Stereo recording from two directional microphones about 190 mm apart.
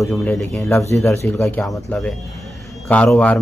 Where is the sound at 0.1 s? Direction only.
5° left (ahead or behind).